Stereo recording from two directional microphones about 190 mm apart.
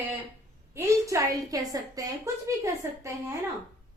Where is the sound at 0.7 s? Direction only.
15° right (ahead or behind).